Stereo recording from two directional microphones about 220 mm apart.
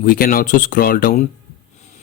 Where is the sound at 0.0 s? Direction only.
40° left (ahead or behind).